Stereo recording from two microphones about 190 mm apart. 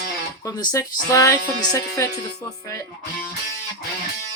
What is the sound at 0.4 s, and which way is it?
Speech, 20° left (ahead or behind).